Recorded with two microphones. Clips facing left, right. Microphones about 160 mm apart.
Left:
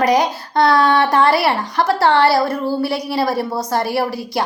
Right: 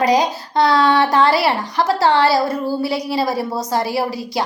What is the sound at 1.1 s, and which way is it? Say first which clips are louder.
A woman's voice: even; 55° left (ahead or behind).